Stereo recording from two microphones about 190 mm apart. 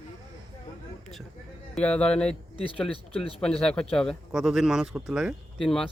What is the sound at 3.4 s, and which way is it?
Speech, 5° left (ahead or behind).